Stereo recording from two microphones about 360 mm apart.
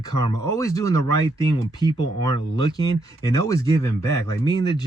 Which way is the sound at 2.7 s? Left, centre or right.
Centre.